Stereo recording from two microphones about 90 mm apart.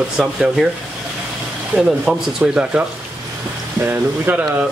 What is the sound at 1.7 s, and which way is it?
Speech, 10° right (ahead or behind).